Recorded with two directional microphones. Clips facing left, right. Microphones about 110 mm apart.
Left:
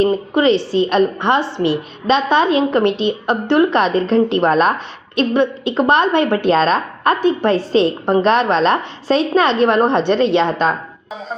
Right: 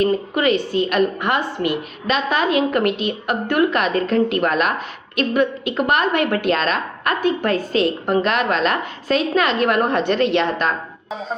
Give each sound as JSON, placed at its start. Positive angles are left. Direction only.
{"t": 0.0, "sound": "a woman's voice", "side_deg": 30}
{"t": 11.1, "sound": "music", "side_deg": 0}